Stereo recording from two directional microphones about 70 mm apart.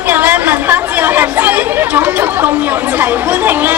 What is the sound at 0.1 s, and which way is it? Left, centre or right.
Chatter, right.